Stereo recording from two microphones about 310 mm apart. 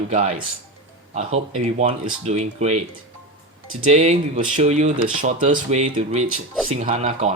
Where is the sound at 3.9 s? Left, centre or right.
Right.